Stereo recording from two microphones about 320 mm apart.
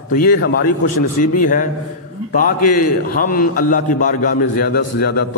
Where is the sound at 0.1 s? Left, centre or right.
Left.